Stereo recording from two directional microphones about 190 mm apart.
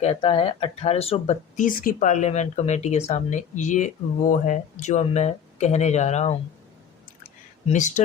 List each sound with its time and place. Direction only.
0.0 s speech: 30° left (ahead or behind)
7.7 s speech: 40° left (ahead or behind)